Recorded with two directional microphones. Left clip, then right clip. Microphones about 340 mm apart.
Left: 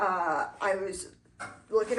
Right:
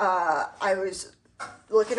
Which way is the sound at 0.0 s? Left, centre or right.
Right.